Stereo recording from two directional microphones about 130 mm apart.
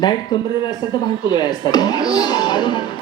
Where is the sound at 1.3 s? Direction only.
35° left (ahead or behind).